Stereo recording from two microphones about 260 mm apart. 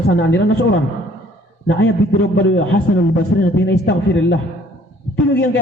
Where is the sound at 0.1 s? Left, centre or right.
Left.